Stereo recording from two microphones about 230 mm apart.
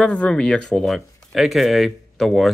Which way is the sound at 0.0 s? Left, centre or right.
Centre.